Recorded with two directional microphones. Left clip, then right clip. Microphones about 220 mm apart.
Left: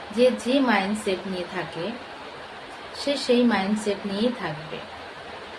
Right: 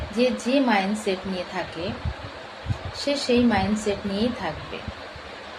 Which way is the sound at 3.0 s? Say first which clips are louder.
Even; 10° left (ahead or behind).